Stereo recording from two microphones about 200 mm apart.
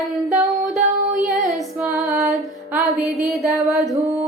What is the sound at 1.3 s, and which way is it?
Music, centre (ahead or behind).